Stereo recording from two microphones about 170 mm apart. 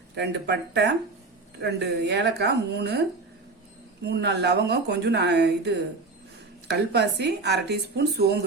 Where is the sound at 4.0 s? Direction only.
85° right.